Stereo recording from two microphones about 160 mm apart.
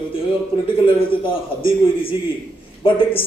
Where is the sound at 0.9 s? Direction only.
35° left (ahead or behind).